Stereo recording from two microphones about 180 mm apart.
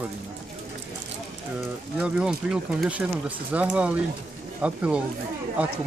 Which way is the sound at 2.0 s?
5° right (ahead or behind).